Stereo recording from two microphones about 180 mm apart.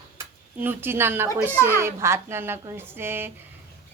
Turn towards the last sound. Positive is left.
turn(degrees=-10)  # may be behind; listen again after turning